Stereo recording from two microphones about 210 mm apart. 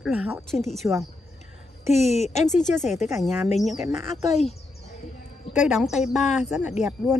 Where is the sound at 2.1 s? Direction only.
30° left (ahead or behind).